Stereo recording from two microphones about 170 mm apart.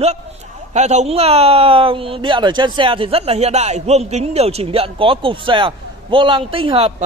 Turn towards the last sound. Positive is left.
turn(degrees=-35)  # may be behind; listen again after turning